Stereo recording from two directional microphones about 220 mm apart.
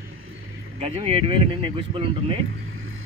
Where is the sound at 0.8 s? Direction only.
25° right (ahead or behind).